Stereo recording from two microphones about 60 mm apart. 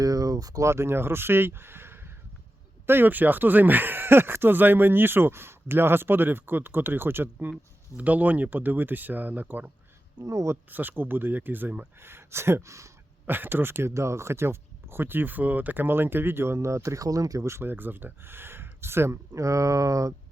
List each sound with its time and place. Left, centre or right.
0.0 s a sound: right
0.6 s a man's voice: right
10.2 s speech: right
10.7 s speech: right
11.9 s speech: right
13.2 s speech: right
13.9 s speech: right
17.6 s speech: right
19.4 s speech: right